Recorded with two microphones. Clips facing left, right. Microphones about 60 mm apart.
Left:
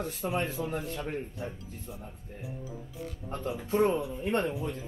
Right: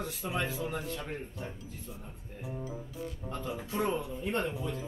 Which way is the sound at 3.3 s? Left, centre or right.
Left.